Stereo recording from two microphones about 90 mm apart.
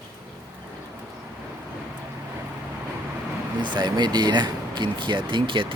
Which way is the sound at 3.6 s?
55° right (ahead or behind).